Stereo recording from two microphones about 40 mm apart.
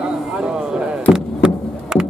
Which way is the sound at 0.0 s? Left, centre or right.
Right.